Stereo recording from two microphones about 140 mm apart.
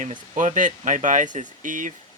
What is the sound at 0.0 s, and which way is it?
Speech, 65° right (ahead or behind).